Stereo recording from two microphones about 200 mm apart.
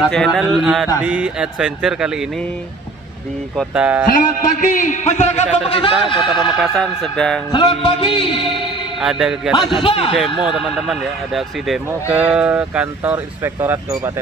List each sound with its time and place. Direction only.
0.1 s music: centre (ahead or behind)
3.5 s speech: 5° right (ahead or behind)
4.1 s a man's voice: 40° left (ahead or behind)
5.7 s music: 25° left (ahead or behind)
6.6 s music: centre (ahead or behind)
7.5 s music: 25° left (ahead or behind)
9.0 s music: centre (ahead or behind)
9.8 s music: 25° left (ahead or behind)
10.4 s speech: 5° right (ahead or behind)